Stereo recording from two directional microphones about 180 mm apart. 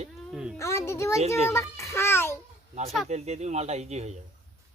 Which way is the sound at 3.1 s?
40° right (ahead or behind).